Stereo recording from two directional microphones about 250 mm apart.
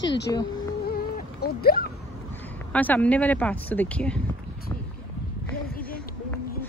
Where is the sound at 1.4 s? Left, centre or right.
Left.